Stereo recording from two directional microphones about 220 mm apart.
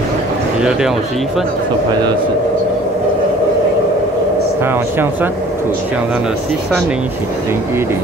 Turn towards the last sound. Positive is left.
turn(degrees=-5)  # may be behind; listen again after turning